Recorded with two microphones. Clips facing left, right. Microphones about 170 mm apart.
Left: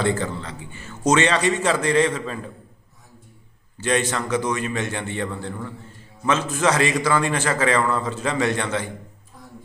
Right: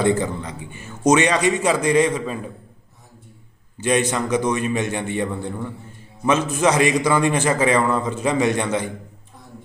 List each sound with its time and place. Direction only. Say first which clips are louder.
0.0 s a man's voice: right 4 dB; 15° right (ahead or behind)
3.8 s a man's voice: right 3 dB; 15° right (ahead or behind)